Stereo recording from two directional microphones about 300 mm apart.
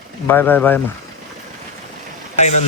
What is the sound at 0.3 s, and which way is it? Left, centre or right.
Speech, centre.